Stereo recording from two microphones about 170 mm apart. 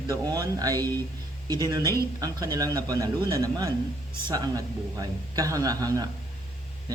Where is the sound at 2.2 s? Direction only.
20° right (ahead or behind).